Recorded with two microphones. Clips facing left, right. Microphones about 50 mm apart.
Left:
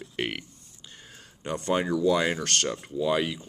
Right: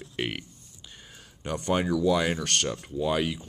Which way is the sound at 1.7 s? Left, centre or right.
Left.